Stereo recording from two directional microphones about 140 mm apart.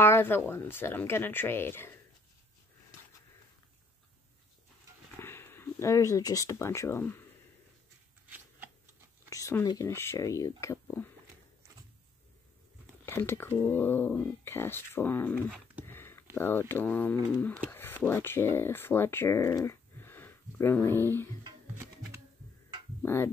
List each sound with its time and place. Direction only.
0.0 s speech: 15° left (ahead or behind)
5.2 s speech: 15° left (ahead or behind)
9.3 s speech: 25° left (ahead or behind)
13.0 s speech: 15° left (ahead or behind)
15.8 s a sound: 15° left (ahead or behind)
16.3 s speech: 15° left (ahead or behind)